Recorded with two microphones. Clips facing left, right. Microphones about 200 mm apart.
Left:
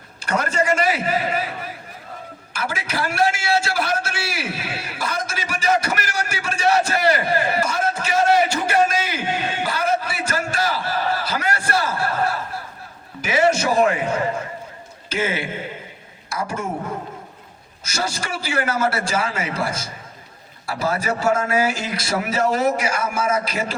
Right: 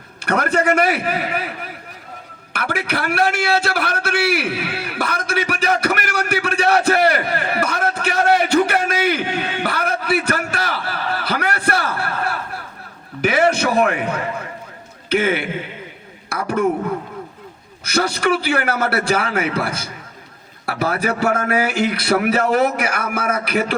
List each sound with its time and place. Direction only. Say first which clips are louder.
0.2 s a man's voice: right 3 dB; 60° right (ahead or behind)
9.6 s a sound: right 1 dB; 60° right (ahead or behind)
15.1 s a man's voice: right 5 dB; 60° right (ahead or behind)
17.8 s a man's voice: right 9 dB; 60° right (ahead or behind)